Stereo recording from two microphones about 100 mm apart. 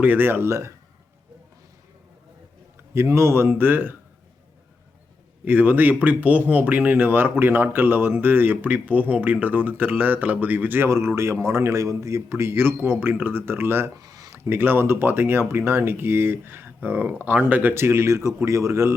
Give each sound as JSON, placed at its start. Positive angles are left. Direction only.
{"t": 0.0, "sound": "speech", "side_deg": -20}
{"t": 2.9, "sound": "speech", "side_deg": -25}
{"t": 5.5, "sound": "speech", "side_deg": -15}
{"t": 13.9, "sound": "a sound", "side_deg": -40}
{"t": 14.3, "sound": "speech", "side_deg": -20}